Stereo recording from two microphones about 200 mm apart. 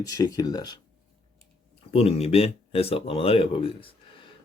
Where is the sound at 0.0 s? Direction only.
20° left (ahead or behind).